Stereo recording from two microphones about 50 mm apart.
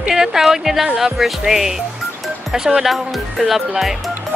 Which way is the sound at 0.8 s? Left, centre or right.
Centre.